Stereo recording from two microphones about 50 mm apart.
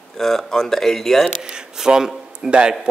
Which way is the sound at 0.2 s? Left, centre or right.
Centre.